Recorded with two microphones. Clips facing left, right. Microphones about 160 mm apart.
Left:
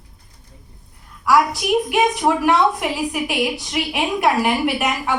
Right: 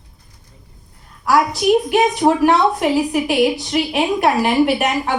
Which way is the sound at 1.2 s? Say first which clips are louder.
Right 2 dB; 30° right (ahead or behind).